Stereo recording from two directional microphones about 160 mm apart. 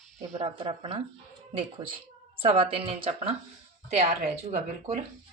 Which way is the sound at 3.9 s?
45° right (ahead or behind).